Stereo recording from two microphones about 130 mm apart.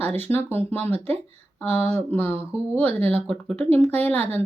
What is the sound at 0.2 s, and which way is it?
Speech, 15° left (ahead or behind).